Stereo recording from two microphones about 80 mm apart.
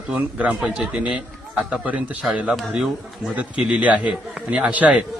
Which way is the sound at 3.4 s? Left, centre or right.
Centre.